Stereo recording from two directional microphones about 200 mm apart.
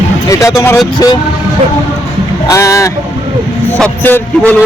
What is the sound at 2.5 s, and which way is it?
Speech, 15° left (ahead or behind).